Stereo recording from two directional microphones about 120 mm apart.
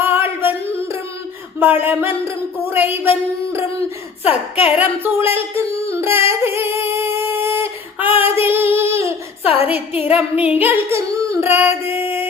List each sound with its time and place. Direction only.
0.0 s singing: 20° right (ahead or behind)
1.5 s a sound: 15° right (ahead or behind)
4.5 s speech: 15° right (ahead or behind)
5.9 s singing: 20° right (ahead or behind)
10.1 s speech: 10° right (ahead or behind)
10.6 s singing: 20° right (ahead or behind)